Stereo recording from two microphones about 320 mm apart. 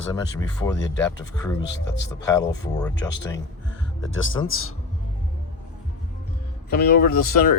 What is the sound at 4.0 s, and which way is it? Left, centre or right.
Speech, left.